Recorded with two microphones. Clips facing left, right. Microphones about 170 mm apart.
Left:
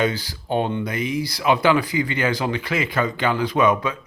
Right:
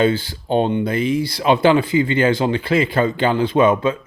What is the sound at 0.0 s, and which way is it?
Speech, 25° right (ahead or behind).